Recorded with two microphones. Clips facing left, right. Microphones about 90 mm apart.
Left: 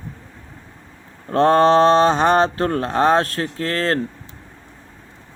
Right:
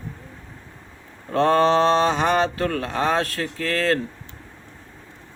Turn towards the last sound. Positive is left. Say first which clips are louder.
# left 1 dB
turn(degrees=40)  # may be behind; listen again after turning